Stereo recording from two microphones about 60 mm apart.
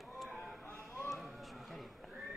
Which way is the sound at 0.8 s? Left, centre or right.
Centre.